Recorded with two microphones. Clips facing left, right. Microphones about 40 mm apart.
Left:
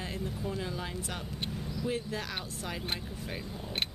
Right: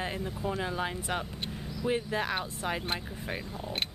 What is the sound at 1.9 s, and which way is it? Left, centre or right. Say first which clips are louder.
Speech: right 7 dB; right.